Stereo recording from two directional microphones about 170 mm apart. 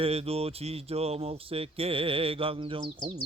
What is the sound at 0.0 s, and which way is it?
Speech, 35° right (ahead or behind).